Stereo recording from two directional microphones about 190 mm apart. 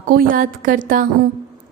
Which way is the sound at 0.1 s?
50° right (ahead or behind).